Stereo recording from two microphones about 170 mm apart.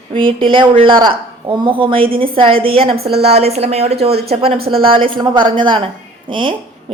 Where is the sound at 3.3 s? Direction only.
35° right (ahead or behind).